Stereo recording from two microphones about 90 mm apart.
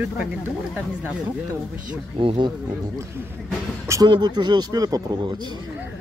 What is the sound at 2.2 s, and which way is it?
Speech, 75° right (ahead or behind).